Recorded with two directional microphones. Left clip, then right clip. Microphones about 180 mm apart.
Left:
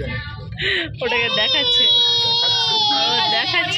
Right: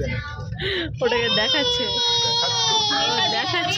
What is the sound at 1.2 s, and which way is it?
Speech, 35° right (ahead or behind).